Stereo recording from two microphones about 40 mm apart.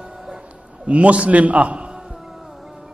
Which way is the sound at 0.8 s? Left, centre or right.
Right.